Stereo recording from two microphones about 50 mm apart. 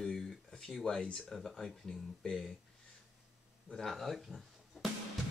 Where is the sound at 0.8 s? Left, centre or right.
Centre.